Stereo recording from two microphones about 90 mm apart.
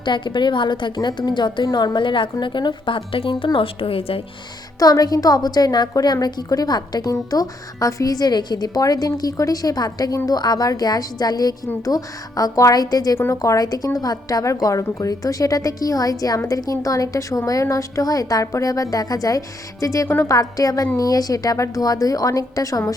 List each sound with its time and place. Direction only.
0.0 s a woman's voice: 55° left (ahead or behind); by 4.2 s 90° left
4.8 s a woman's voice: 45° left (ahead or behind)